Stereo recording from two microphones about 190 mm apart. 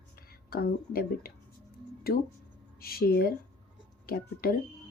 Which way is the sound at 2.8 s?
50° left (ahead or behind).